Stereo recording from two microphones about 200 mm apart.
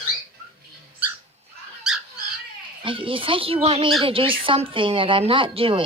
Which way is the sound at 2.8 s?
25° right (ahead or behind).